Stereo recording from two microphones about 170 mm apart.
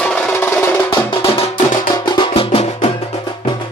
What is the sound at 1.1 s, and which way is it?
Music, 35° left (ahead or behind).